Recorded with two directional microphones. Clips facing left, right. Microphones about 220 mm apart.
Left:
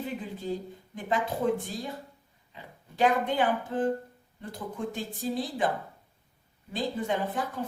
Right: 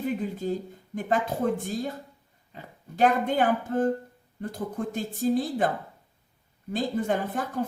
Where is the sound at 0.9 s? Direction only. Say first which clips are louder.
Right 4 dB; 45° right (ahead or behind).